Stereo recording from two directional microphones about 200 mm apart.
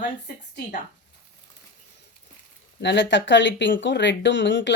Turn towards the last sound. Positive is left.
turn(degrees=65)  # may be behind; listen again after turning